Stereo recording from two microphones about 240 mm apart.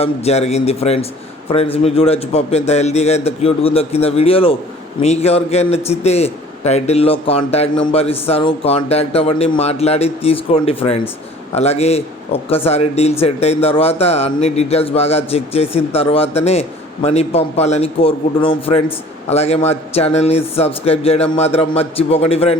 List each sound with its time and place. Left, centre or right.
0.0 s speech: left